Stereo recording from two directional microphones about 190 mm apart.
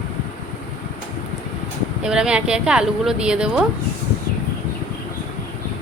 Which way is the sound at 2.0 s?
5° right (ahead or behind).